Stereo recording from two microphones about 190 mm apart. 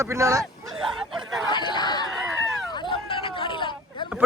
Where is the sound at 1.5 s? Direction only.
25° left (ahead or behind).